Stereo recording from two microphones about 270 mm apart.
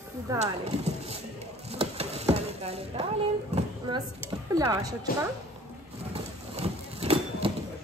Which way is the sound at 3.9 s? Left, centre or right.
Centre.